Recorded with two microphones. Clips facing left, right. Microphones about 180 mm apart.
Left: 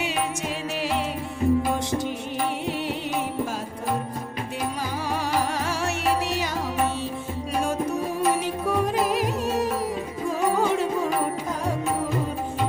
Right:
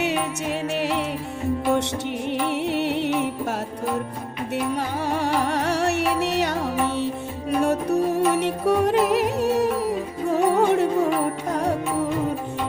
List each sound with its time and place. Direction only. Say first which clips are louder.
2.6 s music: right 5 dB; 70° right (ahead or behind)
5.1 s music: right 3 dB; 60° right (ahead or behind)
7.6 s music: right 6 dB; 65° right (ahead or behind)